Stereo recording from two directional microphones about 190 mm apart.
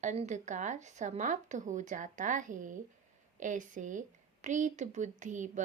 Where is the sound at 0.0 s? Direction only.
40° right (ahead or behind).